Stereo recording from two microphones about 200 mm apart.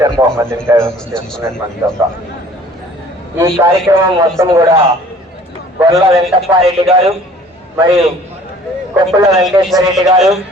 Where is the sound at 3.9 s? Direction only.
15° right (ahead or behind).